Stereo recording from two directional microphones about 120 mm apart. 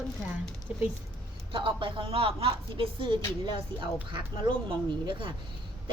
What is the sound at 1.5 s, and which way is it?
Speech, 45° right (ahead or behind).